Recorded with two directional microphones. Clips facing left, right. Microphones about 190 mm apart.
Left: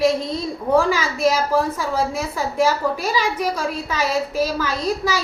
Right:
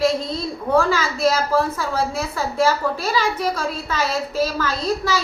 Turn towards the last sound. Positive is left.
turn(degrees=15)  # may be behind; listen again after turning